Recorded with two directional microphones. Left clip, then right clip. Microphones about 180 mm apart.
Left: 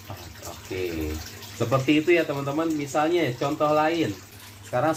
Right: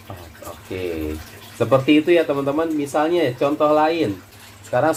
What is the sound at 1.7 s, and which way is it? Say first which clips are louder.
Speech: right 6 dB; 50° right (ahead or behind).